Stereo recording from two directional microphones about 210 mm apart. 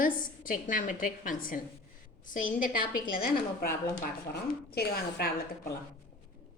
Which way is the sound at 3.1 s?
45° left (ahead or behind).